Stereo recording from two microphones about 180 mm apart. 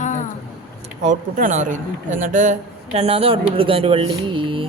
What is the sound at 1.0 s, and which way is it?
Speech, 45° right (ahead or behind).